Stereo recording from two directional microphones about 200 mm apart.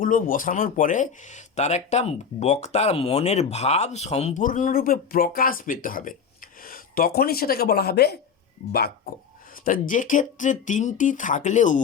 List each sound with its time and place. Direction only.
0.0 s speech: 45° left (ahead or behind)